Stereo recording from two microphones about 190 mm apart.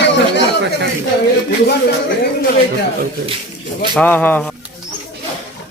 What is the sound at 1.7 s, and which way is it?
Speech, 60° left (ahead or behind).